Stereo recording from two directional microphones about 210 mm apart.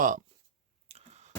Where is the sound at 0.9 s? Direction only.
30° right (ahead or behind).